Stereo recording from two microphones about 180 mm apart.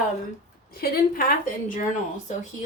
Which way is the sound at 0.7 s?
55° left (ahead or behind).